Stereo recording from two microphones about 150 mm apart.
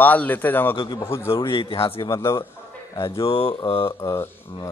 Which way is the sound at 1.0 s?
15° left (ahead or behind).